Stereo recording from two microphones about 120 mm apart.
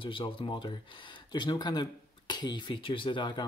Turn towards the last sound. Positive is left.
turn(degrees=40)  # may be behind; listen again after turning